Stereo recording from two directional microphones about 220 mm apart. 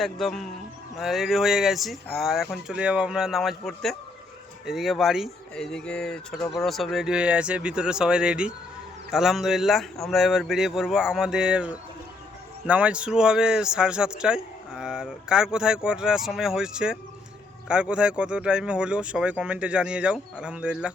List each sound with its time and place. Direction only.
0.0 s speech: centre (ahead or behind)